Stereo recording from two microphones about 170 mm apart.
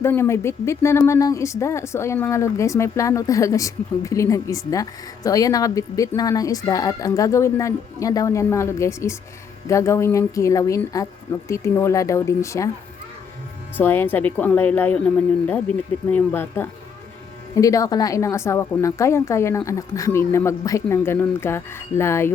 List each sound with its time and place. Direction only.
0.0 s speech: 15° left (ahead or behind)
13.7 s speech: 10° left (ahead or behind)